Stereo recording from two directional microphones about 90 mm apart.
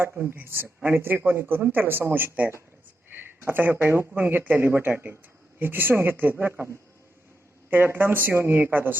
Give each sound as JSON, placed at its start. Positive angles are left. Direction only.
{"t": 0.0, "sound": "speech", "side_deg": -25}
{"t": 7.7, "sound": "speech", "side_deg": -25}